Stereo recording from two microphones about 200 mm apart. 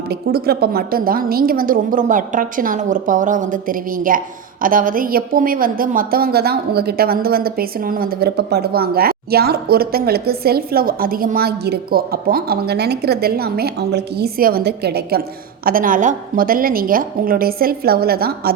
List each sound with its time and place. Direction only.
0.1 s a woman's voice: 50° right (ahead or behind)
15.6 s a woman's voice: 45° right (ahead or behind)